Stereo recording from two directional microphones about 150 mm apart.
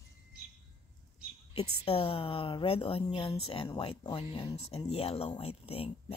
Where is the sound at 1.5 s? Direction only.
40° left (ahead or behind).